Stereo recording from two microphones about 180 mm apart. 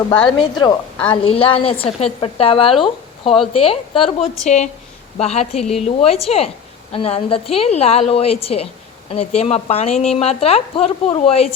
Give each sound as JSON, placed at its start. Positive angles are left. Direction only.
{"t": 0.3, "sound": "speech", "side_deg": 25}